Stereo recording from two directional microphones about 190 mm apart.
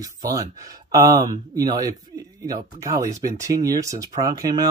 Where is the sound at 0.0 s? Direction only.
20° right (ahead or behind).